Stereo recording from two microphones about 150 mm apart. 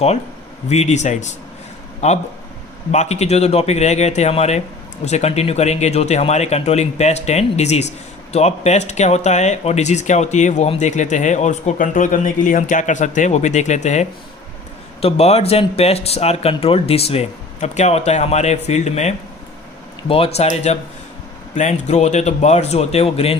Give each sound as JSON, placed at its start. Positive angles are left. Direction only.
{"t": 0.7, "sound": "speech", "side_deg": 50}
{"t": 20.1, "sound": "speech", "side_deg": 40}